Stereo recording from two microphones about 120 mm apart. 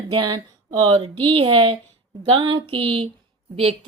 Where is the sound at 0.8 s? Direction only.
50° right (ahead or behind).